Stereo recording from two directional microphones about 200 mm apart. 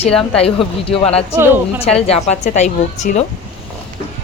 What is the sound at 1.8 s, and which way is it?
A woman's voice, 30° left (ahead or behind).